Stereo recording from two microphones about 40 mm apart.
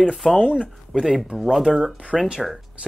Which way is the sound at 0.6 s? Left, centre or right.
Centre.